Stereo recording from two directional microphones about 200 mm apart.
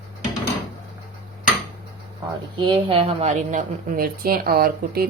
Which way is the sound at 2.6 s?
25° right (ahead or behind).